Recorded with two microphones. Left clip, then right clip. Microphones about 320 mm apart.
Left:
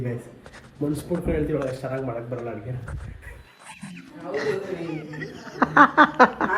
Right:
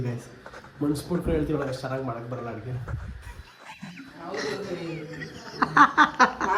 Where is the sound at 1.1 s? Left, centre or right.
Centre.